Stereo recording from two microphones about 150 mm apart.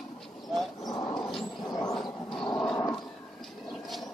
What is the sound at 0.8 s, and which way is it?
Dog, 25° left (ahead or behind).